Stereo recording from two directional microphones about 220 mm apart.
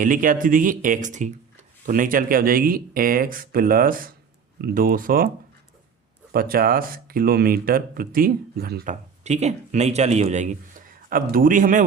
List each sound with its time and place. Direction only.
0.0 s speech: 40° right (ahead or behind)
6.3 s speech: 40° right (ahead or behind)